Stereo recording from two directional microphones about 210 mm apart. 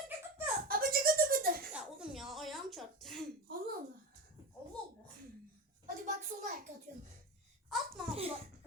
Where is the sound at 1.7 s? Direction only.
5° right (ahead or behind).